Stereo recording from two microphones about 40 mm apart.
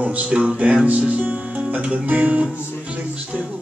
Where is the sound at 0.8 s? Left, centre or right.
Right.